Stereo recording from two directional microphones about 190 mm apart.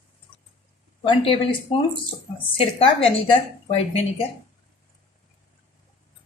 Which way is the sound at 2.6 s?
30° left (ahead or behind).